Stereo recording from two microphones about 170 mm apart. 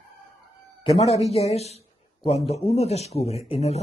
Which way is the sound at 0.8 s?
40° left (ahead or behind).